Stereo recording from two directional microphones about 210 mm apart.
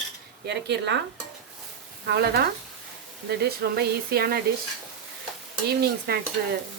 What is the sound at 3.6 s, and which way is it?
Speech, 45° right (ahead or behind).